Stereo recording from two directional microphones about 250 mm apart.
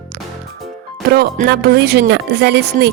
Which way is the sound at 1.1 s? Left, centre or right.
Right.